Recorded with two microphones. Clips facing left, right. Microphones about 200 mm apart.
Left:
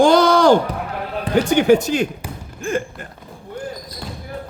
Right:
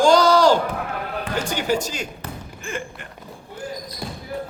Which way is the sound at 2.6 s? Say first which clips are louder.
Left 9 dB; 45° left (ahead or behind).